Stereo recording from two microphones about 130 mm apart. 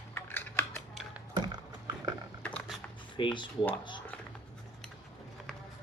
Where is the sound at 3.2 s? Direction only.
35° left (ahead or behind).